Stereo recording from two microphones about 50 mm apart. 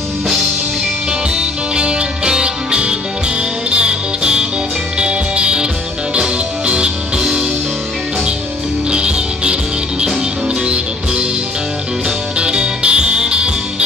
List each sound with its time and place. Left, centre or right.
1.3 s music: right
8.9 s music: centre
12.4 s music: centre